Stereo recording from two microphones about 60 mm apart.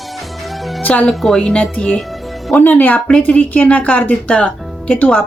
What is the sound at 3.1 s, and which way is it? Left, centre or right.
Speech, centre.